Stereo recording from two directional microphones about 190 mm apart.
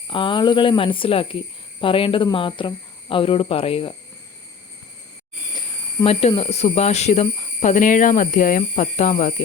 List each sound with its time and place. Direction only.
0.1 s speech: 25° left (ahead or behind)
6.1 s speech: 35° left (ahead or behind)